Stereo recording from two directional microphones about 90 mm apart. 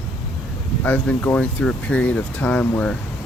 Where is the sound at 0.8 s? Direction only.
15° left (ahead or behind).